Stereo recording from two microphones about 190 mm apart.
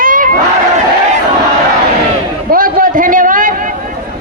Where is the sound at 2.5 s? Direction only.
50° right (ahead or behind).